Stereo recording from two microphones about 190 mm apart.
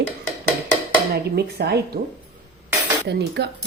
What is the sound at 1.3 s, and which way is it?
Speech, 60° right (ahead or behind).